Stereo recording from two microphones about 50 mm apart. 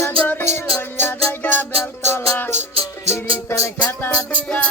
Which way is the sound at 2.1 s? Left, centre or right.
Left.